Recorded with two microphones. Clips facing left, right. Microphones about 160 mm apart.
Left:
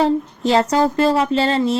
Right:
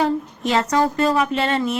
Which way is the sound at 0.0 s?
30° left (ahead or behind).